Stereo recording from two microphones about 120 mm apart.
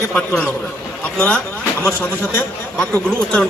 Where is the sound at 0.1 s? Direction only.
10° left (ahead or behind).